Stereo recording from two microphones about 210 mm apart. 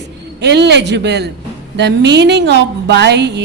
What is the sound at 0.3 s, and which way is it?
Speech, 55° right (ahead or behind).